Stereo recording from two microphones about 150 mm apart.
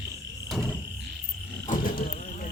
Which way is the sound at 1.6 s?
70° left (ahead or behind).